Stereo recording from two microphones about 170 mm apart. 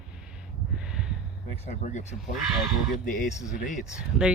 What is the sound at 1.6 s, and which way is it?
Speech, 45° left (ahead or behind).